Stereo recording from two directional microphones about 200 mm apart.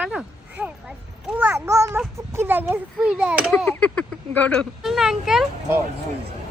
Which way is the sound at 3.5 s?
5° left (ahead or behind).